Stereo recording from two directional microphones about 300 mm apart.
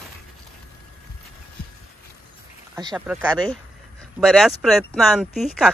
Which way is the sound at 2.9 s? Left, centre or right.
Centre.